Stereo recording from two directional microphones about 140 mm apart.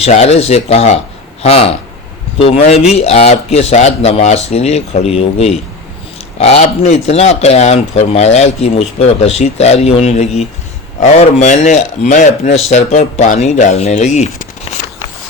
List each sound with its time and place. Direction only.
0.0 s speech: 50° left (ahead or behind)